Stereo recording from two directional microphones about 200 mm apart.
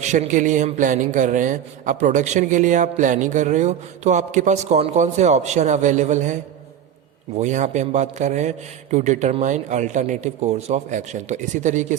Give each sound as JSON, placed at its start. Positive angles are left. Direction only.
{"t": 0.0, "sound": "a man's voice", "side_deg": -35}